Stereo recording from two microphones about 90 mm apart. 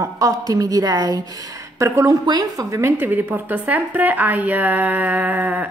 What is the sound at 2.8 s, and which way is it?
A woman's voice, 25° right (ahead or behind).